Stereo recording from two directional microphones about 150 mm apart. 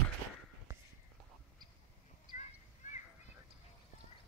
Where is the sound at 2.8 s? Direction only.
55° left (ahead or behind).